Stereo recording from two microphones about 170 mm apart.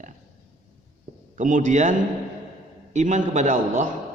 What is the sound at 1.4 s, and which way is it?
A man's voice, 50° right (ahead or behind).